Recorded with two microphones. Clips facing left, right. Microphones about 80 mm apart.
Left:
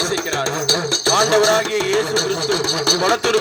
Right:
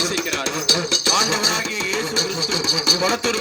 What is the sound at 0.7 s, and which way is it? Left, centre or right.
Music, left.